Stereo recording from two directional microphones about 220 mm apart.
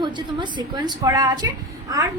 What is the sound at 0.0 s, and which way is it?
A woman's voice, 20° right (ahead or behind).